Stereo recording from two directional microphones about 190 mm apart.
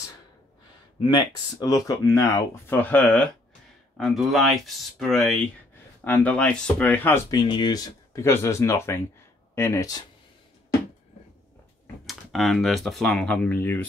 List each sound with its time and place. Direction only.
1.0 s speech: 20° left (ahead or behind)
12.1 s speech: centre (ahead or behind)